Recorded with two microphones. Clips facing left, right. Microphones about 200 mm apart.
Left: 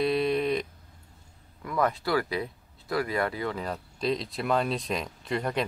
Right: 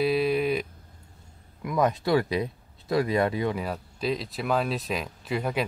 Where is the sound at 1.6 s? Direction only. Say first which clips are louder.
Right 3 dB; 15° right (ahead or behind).